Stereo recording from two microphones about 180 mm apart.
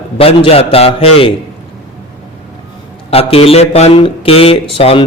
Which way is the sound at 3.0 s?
35° left (ahead or behind).